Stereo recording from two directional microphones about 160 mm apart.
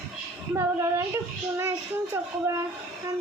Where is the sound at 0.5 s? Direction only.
15° right (ahead or behind).